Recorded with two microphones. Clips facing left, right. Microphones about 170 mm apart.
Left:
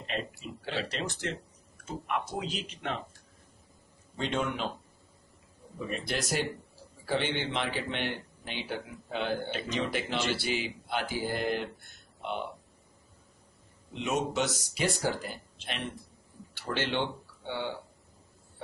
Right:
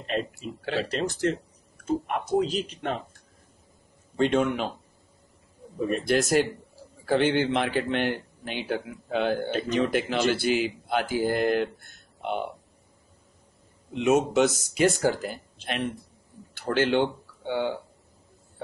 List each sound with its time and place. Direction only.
0.0 s speech: 45° right (ahead or behind)
4.2 s a man's voice: 55° right (ahead or behind)
5.8 s speech: 50° right (ahead or behind)
13.9 s speech: 50° right (ahead or behind)